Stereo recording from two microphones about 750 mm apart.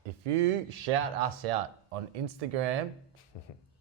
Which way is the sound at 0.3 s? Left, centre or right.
Right.